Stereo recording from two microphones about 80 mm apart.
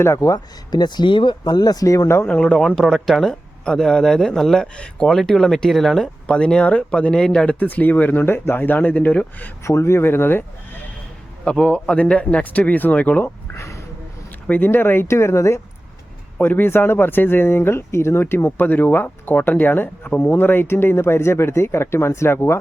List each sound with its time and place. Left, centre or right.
0.2 s speech: left
2.2 s speech: centre
6.2 s speech: centre
9.6 s speech: left
11.4 s speech: centre; by 13.8 s left
14.4 s speech: left